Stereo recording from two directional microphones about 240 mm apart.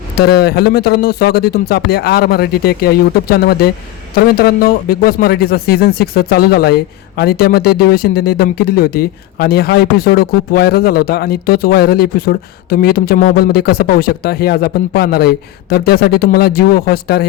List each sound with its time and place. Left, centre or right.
0.2 s speech: left